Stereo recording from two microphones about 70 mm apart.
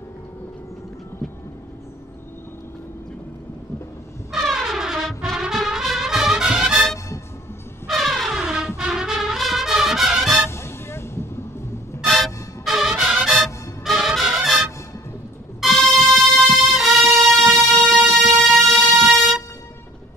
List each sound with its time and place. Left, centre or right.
4.3 s brass instrument: centre
7.9 s music: centre
10.5 s vehicle: left
12.1 s music: centre
15.6 s music: centre